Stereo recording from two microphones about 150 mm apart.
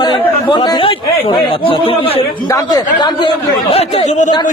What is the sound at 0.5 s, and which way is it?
Speech, 30° left (ahead or behind).